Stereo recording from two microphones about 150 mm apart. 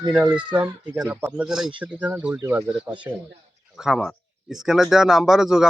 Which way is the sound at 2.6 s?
10° right (ahead or behind).